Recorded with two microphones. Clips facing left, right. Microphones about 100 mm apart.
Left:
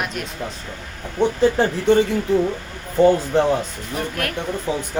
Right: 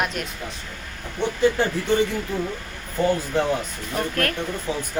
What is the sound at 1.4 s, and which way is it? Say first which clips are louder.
Speech: left 3 dB; 35° left (ahead or behind).